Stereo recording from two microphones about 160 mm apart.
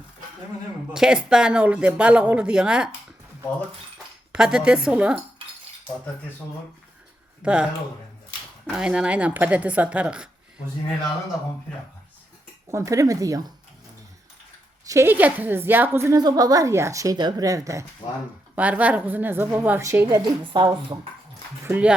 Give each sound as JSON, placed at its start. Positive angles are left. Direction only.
{"t": 0.9, "sound": "speech", "side_deg": -5}
{"t": 4.3, "sound": "speech", "side_deg": -5}
{"t": 7.4, "sound": "a woman's voice", "side_deg": -5}
{"t": 12.6, "sound": "a woman's voice", "side_deg": -20}
{"t": 14.8, "sound": "a woman's voice", "side_deg": -15}
{"t": 18.5, "sound": "a woman's voice", "side_deg": -10}
{"t": 20.4, "sound": "speech", "side_deg": -30}
{"t": 21.6, "sound": "a woman's voice", "side_deg": -10}